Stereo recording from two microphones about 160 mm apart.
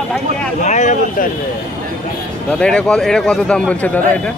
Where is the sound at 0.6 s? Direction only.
50° left (ahead or behind).